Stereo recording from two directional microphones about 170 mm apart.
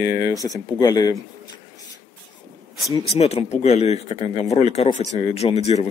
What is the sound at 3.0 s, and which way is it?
Speech, 40° left (ahead or behind).